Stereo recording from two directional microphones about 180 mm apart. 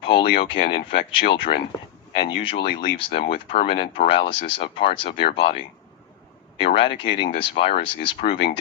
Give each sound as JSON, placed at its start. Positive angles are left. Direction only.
{"t": 0.0, "sound": "speech", "side_deg": 30}
{"t": 6.6, "sound": "speech", "side_deg": 30}